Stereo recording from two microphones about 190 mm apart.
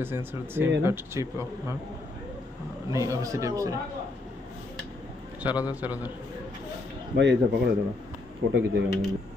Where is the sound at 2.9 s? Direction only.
15° right (ahead or behind).